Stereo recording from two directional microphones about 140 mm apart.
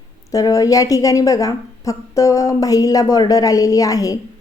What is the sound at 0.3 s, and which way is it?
Speech, 25° left (ahead or behind).